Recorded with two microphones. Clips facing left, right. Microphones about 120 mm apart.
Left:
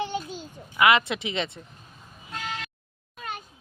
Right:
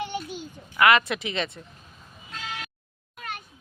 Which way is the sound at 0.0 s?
25° left (ahead or behind).